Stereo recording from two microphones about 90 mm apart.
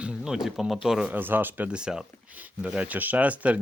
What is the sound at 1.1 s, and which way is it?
Speech, 20° right (ahead or behind).